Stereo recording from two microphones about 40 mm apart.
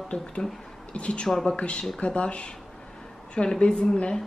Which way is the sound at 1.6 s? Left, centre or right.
Left.